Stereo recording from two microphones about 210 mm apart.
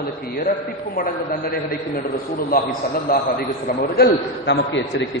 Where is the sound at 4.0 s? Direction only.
55° left (ahead or behind).